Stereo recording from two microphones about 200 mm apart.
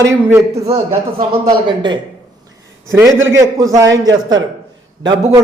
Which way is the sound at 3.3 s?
15° right (ahead or behind).